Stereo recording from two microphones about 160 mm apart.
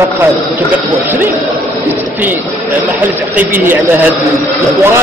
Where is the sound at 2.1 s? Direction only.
10° right (ahead or behind).